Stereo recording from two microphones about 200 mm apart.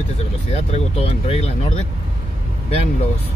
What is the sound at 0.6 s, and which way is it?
Speech, 30° left (ahead or behind).